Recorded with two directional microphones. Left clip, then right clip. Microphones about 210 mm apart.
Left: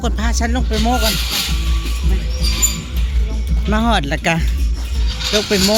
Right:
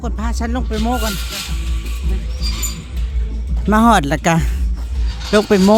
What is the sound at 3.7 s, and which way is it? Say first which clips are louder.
Speech: right 5 dB; 35° right (ahead or behind).